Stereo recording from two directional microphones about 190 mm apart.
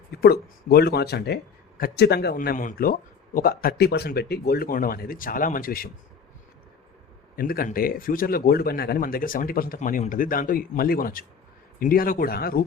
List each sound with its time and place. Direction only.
0.2 s speech: 55° left (ahead or behind)
7.3 s speech: 50° left (ahead or behind)